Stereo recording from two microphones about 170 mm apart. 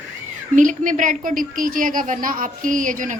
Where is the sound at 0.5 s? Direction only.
50° right (ahead or behind).